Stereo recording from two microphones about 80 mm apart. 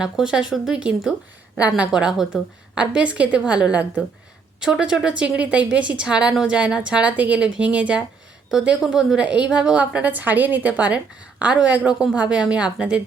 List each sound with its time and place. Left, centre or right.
0.0 s a woman's voice: centre
4.6 s a woman's voice: centre
8.4 s a woman's voice: centre